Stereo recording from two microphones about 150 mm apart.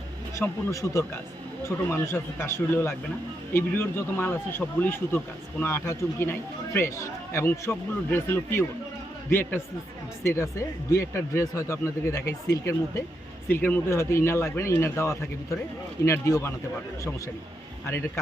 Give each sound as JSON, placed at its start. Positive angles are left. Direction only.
{"t": 0.3, "sound": "speech", "side_deg": 20}
{"t": 2.4, "sound": "speech", "side_deg": 15}